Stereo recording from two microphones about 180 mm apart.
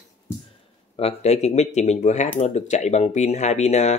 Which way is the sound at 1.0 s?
35° left (ahead or behind).